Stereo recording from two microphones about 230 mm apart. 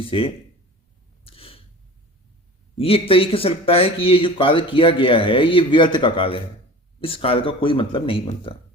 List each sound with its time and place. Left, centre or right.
0.0 s speech: left
1.2 s a sound: left
2.7 s speech: left